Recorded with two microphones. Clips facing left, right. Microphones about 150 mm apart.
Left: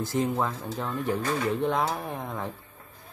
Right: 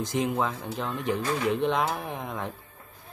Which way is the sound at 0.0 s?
20° right (ahead or behind).